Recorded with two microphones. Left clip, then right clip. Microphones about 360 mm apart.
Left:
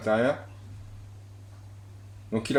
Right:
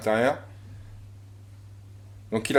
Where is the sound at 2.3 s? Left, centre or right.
Right.